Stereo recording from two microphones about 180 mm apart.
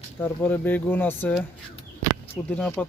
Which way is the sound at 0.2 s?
10° left (ahead or behind).